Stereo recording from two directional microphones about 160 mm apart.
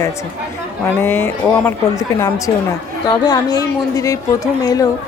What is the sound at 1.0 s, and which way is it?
A woman's voice, 15° left (ahead or behind).